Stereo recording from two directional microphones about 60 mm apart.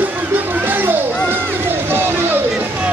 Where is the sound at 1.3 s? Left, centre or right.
Right.